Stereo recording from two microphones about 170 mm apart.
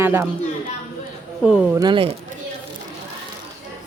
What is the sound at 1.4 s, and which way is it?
Speech, 5° right (ahead or behind).